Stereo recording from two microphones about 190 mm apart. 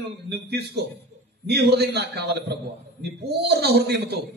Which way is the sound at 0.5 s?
60° right (ahead or behind).